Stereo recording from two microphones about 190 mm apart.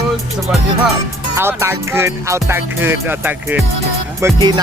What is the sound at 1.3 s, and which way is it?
Music, 15° right (ahead or behind).